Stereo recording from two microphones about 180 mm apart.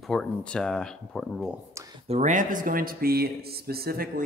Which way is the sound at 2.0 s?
40° right (ahead or behind).